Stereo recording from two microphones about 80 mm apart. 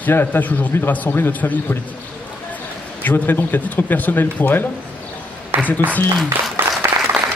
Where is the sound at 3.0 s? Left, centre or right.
Left.